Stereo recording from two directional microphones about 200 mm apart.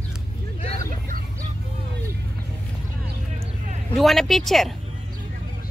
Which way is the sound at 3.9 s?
Centre (ahead or behind).